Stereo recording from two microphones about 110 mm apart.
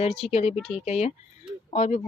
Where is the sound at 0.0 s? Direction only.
70° left (ahead or behind).